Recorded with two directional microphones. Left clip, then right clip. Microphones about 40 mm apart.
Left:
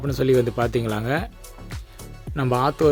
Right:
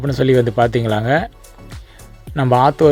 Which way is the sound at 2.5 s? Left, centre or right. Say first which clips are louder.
Right 8 dB; right.